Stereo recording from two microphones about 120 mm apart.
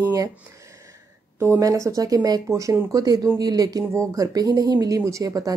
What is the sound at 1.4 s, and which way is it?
Speech, 25° right (ahead or behind).